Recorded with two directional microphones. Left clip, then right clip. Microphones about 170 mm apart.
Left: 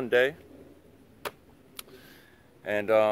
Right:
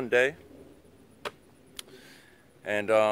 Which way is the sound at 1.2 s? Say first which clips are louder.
Even; 35° left (ahead or behind).